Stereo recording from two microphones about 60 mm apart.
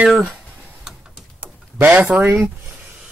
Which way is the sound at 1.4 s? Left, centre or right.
Right.